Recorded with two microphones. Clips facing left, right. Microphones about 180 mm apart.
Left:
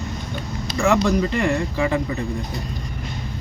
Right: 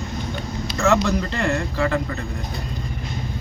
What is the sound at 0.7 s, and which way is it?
Speech, 10° left (ahead or behind).